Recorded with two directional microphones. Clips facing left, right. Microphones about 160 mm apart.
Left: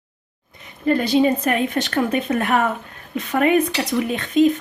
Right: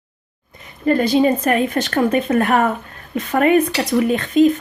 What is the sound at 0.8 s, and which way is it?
Speech, 45° right (ahead or behind).